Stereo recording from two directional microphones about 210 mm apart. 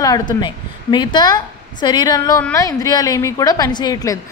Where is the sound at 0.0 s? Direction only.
20° left (ahead or behind).